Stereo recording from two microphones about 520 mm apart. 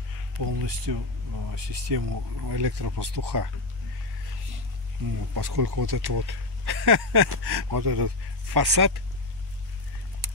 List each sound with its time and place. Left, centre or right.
0.4 s speech: right
5.3 s speech: right